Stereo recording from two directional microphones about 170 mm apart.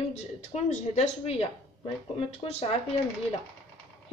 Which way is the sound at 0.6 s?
40° left (ahead or behind).